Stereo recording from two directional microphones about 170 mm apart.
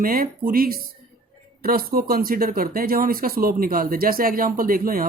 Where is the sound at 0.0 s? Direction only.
60° right (ahead or behind).